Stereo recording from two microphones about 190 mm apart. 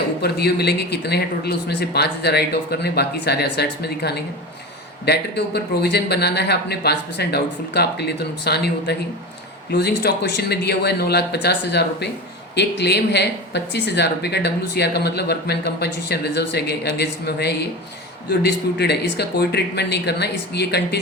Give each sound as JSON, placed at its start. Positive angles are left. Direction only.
{"t": 0.2, "sound": "speech", "side_deg": 55}